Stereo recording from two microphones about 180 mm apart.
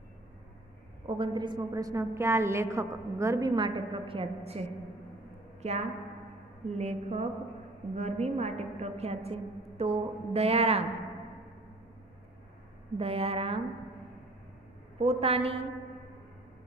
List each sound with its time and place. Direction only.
1.0 s a woman's voice: 30° right (ahead or behind)
12.9 s a woman's voice: 35° right (ahead or behind)
15.0 s a woman's voice: 35° right (ahead or behind)